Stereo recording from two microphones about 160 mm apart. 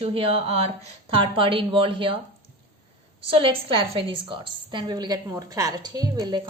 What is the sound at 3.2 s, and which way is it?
A woman's voice, 35° right (ahead or behind).